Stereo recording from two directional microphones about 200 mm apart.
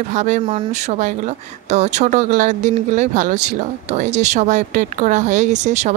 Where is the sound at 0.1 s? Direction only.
35° right (ahead or behind).